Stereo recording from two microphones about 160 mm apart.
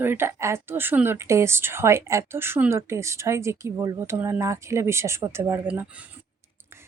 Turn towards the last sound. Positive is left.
turn(degrees=-15)  # may be behind; listen again after turning